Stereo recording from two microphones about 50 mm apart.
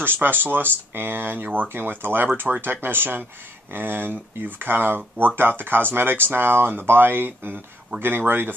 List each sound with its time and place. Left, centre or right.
0.0 s speech: right